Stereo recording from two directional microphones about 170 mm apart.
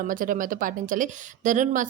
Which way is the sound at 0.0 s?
55° right (ahead or behind).